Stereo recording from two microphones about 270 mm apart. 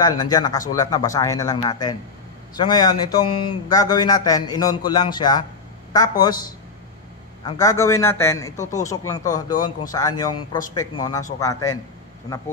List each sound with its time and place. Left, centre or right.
0.0 s a man's voice: centre
7.4 s a man's voice: centre